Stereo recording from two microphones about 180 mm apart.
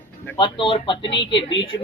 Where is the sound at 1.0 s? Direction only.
75° left (ahead or behind).